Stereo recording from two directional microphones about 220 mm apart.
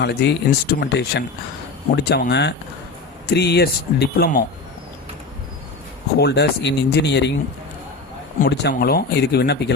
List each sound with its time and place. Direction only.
0.0 s speech: 50° left (ahead or behind)
6.1 s speech: 50° left (ahead or behind)
8.4 s speech: 50° left (ahead or behind)